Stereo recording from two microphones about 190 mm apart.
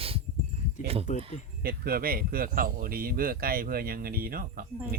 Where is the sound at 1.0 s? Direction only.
35° left (ahead or behind).